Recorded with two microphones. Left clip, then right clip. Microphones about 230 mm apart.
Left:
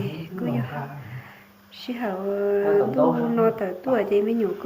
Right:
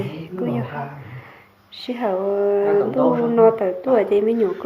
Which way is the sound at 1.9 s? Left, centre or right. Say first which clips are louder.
Right 6 dB; centre.